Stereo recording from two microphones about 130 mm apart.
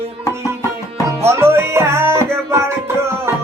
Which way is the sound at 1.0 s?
20° right (ahead or behind).